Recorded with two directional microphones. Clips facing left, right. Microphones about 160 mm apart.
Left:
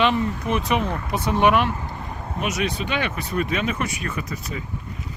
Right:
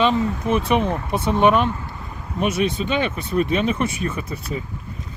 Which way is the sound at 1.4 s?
10° left (ahead or behind).